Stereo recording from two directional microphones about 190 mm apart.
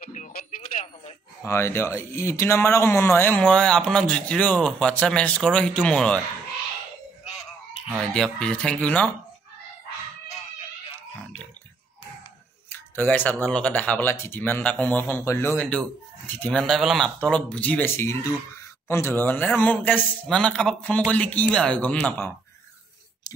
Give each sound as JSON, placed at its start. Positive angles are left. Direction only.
{"t": 0.1, "sound": "radio", "side_deg": 45}
{"t": 1.4, "sound": "speech", "side_deg": 15}
{"t": 7.9, "sound": "speech", "side_deg": 0}
{"t": 12.6, "sound": "a man's voice", "side_deg": 10}